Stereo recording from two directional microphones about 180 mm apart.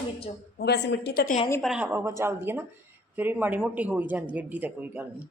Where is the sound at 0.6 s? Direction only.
65° left (ahead or behind).